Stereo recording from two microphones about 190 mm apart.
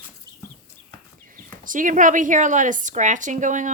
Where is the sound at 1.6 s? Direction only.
45° right (ahead or behind).